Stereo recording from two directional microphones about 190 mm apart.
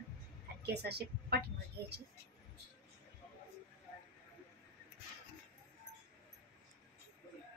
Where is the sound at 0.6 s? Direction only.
60° right (ahead or behind).